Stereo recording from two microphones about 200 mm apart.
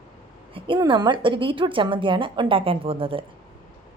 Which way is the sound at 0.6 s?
25° right (ahead or behind).